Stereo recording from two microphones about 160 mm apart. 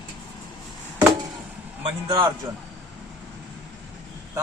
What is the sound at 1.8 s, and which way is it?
Speech, 30° right (ahead or behind).